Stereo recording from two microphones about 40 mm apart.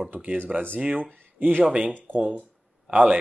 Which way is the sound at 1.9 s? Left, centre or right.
Right.